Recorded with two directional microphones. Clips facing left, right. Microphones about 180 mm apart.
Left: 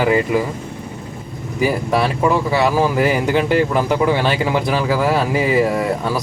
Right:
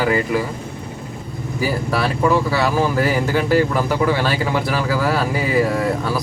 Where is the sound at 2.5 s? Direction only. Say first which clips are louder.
Left 2 dB; 20° left (ahead or behind).